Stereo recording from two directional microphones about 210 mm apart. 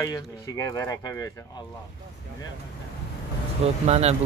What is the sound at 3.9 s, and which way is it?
Speech, 30° right (ahead or behind).